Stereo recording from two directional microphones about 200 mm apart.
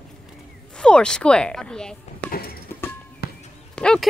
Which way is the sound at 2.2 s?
5° left (ahead or behind).